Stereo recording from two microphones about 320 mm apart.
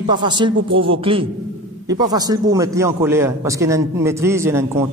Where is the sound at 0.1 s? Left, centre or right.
Centre.